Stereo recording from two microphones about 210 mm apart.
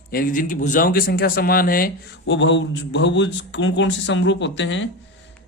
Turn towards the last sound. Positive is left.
turn(degrees=60)  # may be behind; listen again after turning